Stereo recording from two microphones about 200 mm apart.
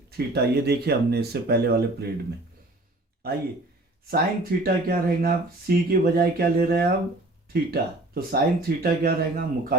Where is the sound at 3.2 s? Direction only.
50° right (ahead or behind).